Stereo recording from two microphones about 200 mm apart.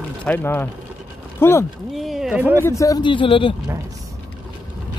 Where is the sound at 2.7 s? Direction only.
15° left (ahead or behind).